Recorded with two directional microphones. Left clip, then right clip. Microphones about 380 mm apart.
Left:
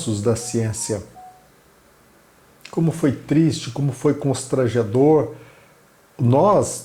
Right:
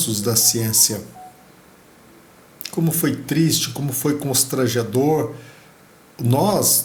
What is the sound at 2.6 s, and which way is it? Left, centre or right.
Speech, left.